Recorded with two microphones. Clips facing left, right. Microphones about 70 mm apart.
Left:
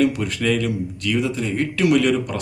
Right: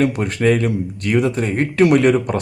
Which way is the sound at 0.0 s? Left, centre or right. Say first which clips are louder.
Right 3 dB; right.